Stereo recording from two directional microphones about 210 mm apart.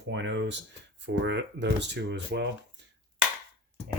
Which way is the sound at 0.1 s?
60° right (ahead or behind).